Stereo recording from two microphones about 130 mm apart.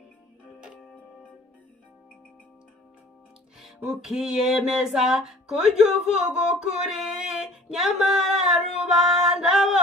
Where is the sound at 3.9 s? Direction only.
5° right (ahead or behind).